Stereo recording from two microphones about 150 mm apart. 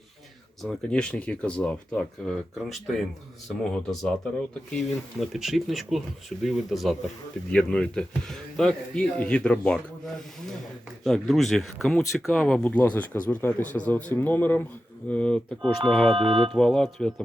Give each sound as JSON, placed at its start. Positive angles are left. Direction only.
{"t": 0.6, "sound": "a man's voice", "side_deg": 5}
{"t": 11.0, "sound": "a man's voice", "side_deg": 0}
{"t": 16.1, "sound": "speech", "side_deg": -40}
{"t": 16.6, "sound": "speech", "side_deg": 5}